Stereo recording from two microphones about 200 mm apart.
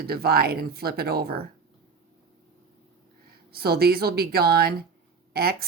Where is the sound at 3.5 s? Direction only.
50° right (ahead or behind).